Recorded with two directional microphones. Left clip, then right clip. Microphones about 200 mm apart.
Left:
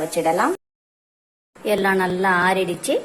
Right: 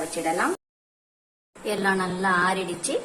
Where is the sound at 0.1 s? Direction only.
20° left (ahead or behind).